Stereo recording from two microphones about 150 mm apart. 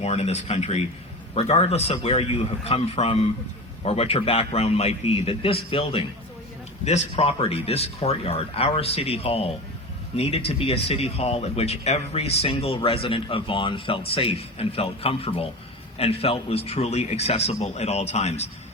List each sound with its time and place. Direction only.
0.0 s a man's voice: 45° left (ahead or behind)